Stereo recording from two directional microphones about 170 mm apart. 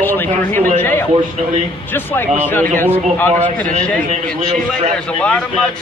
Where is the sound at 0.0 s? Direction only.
10° left (ahead or behind).